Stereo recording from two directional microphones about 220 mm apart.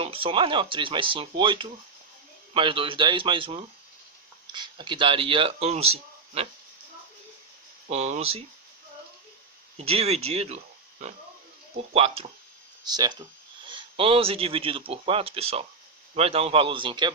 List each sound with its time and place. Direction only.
0.0 s speech: 25° right (ahead or behind)
7.9 s speech: 30° right (ahead or behind)
9.7 s speech: 30° right (ahead or behind)
11.9 s speech: 25° right (ahead or behind)